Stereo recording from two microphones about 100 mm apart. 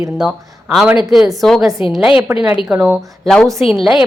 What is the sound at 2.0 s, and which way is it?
A woman's voice, 10° right (ahead or behind).